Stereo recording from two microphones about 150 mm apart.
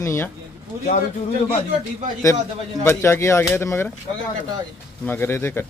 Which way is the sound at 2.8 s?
15° left (ahead or behind).